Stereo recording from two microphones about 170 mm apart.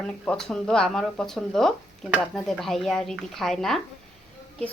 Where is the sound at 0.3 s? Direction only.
5° left (ahead or behind).